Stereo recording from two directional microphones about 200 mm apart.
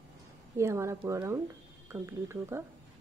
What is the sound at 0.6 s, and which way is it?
A woman's voice, 15° right (ahead or behind).